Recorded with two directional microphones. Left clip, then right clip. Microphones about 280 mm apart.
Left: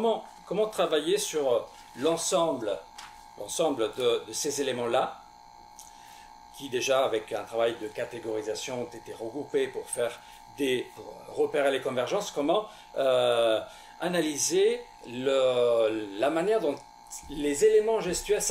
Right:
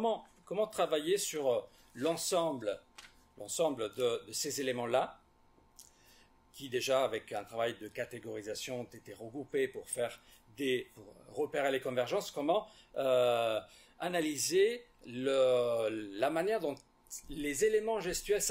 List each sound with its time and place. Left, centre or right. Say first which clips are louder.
0.0 s speech: left 7 dB; right
6.6 s speech: left 6 dB; right